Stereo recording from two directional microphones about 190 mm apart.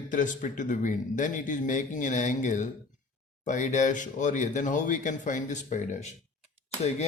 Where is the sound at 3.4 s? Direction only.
40° left (ahead or behind).